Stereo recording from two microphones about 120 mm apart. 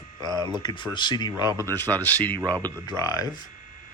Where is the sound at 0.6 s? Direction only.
35° left (ahead or behind).